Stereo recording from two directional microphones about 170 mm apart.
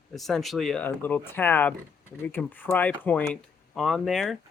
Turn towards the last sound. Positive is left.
turn(degrees=0)  # may be behind; listen again after turning